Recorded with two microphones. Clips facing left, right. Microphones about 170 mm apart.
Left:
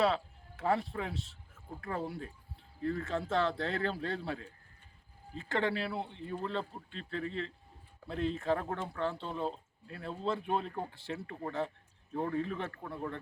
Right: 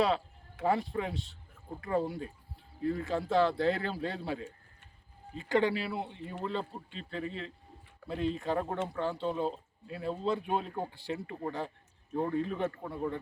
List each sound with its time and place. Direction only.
0.0 s speech: centre (ahead or behind)